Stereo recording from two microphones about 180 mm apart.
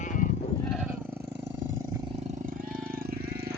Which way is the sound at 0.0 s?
45° left (ahead or behind).